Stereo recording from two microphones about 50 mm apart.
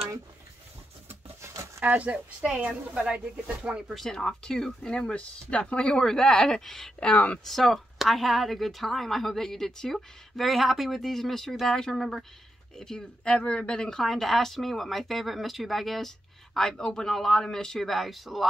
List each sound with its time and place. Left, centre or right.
1.0 s rub: right
1.9 s speech: right
3.9 s speech: centre
4.9 s speech: left
14.0 s speech: centre
16.5 s speech: centre